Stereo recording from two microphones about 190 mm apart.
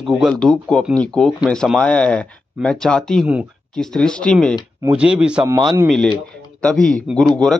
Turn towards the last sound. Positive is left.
turn(degrees=0)  # may be behind; listen again after turning